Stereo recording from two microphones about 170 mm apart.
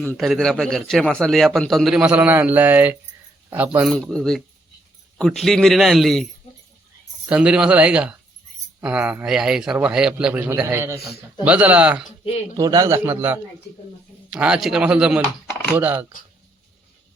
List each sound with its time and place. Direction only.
0.0 s a man's voice: centre (ahead or behind)
3.8 s a man's voice: centre (ahead or behind)
7.3 s a man's voice: 5° right (ahead or behind)
12.5 s a man's voice: 20° right (ahead or behind)